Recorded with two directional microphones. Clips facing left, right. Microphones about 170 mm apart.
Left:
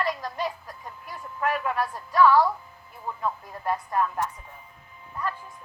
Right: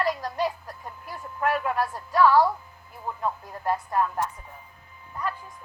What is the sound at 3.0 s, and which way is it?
Speech, 10° right (ahead or behind).